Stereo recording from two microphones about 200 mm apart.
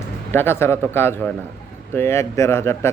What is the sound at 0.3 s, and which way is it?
Speech, 10° left (ahead or behind).